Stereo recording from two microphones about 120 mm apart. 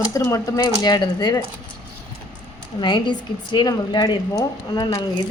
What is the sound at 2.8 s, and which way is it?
A woman's voice, 40° left (ahead or behind).